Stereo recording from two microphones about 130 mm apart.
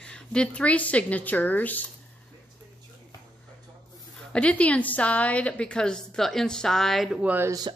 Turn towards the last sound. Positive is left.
turn(degrees=-30)  # may be behind; listen again after turning